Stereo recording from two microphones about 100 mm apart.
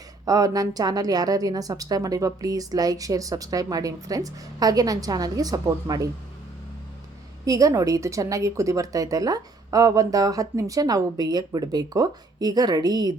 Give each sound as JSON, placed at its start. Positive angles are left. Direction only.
{"t": 0.3, "sound": "a woman's voice", "side_deg": -35}
{"t": 7.4, "sound": "a woman's voice", "side_deg": -35}